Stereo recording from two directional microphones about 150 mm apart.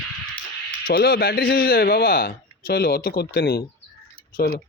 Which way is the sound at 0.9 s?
90° left.